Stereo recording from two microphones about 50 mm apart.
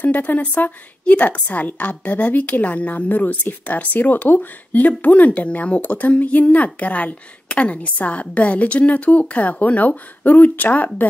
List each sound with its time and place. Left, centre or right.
0.0 s a woman's voice: left